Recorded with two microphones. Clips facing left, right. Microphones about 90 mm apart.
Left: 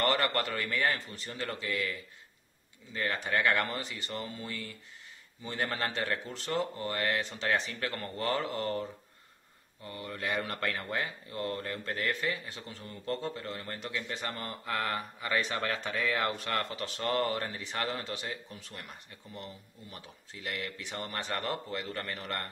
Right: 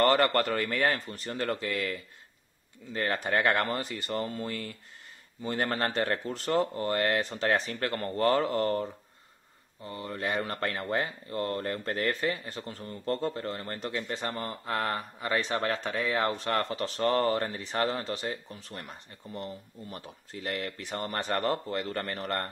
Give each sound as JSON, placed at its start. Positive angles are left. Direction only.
{"t": 0.0, "sound": "speech", "side_deg": -40}
{"t": 9.8, "sound": "speech", "side_deg": -30}